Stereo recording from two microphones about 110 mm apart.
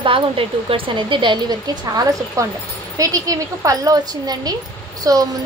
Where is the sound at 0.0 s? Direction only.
55° right (ahead or behind).